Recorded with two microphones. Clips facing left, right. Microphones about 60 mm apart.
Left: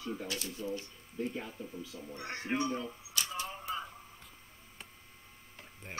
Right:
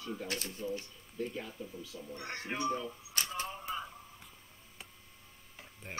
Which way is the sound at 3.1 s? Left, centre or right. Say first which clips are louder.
Even; right.